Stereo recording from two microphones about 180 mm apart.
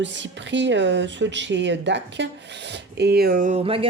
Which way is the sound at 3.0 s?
60° right (ahead or behind).